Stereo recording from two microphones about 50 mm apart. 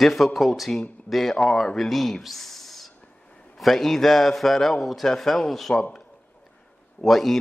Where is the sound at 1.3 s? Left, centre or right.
Centre.